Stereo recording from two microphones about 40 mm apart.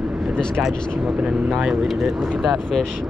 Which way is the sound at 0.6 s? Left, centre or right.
Right.